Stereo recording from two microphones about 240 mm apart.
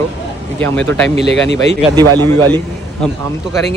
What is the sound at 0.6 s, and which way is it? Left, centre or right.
Speech, centre.